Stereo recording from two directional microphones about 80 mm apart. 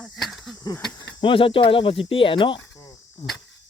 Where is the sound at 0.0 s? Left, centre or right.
Centre.